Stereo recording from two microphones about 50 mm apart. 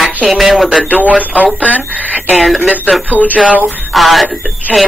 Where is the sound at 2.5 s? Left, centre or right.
Right.